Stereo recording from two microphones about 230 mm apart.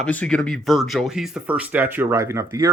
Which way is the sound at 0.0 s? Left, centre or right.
Centre.